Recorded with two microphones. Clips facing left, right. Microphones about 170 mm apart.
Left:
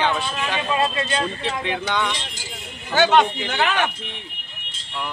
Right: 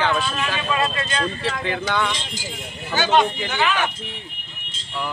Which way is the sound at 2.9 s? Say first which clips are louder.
Left 2 dB; 65° left (ahead or behind).